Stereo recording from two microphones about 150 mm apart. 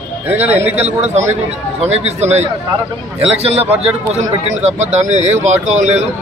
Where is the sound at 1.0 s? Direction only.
50° right (ahead or behind).